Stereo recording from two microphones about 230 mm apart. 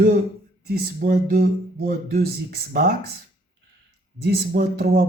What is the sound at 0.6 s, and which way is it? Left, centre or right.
Speech, right.